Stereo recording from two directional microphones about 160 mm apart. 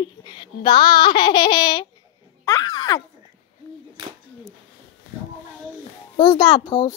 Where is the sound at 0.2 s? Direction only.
30° left (ahead or behind).